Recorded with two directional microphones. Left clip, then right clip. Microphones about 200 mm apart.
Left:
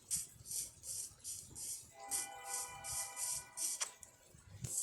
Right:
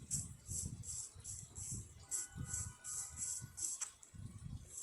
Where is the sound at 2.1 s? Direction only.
40° left (ahead or behind).